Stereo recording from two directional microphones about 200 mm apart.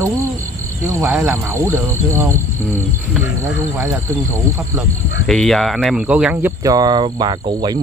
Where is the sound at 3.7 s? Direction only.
15° right (ahead or behind).